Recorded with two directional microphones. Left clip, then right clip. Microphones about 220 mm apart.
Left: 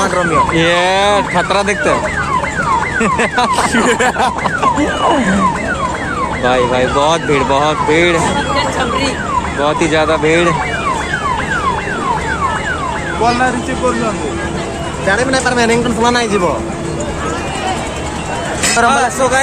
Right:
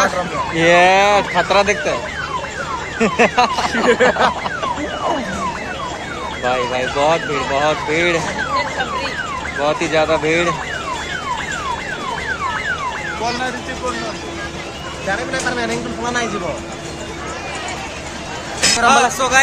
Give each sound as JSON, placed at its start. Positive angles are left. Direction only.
{"t": 0.6, "sound": "speech", "side_deg": 0}
{"t": 3.0, "sound": "speech", "side_deg": 0}
{"t": 3.7, "sound": "speech", "side_deg": 45}
{"t": 6.4, "sound": "speech", "side_deg": 0}
{"t": 9.6, "sound": "speech", "side_deg": 0}
{"t": 15.0, "sound": "speech", "side_deg": 50}
{"t": 18.6, "sound": "a sound", "side_deg": -35}
{"t": 18.9, "sound": "speech", "side_deg": -5}